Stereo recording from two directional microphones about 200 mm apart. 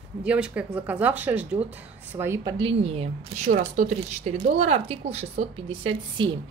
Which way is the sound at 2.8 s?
30° right (ahead or behind).